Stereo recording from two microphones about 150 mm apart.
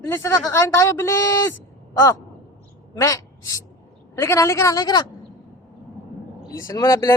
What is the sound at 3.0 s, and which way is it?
A man's voice, 20° left (ahead or behind).